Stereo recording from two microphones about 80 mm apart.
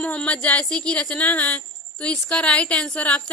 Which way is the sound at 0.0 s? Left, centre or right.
Centre.